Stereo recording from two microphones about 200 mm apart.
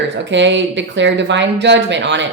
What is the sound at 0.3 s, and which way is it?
A woman's voice, 65° right (ahead or behind).